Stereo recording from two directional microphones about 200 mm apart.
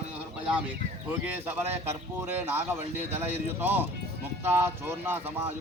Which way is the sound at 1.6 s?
10° right (ahead or behind).